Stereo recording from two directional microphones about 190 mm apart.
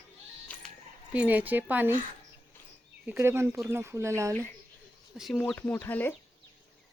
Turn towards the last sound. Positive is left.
turn(degrees=10)  # may be behind; listen again after turning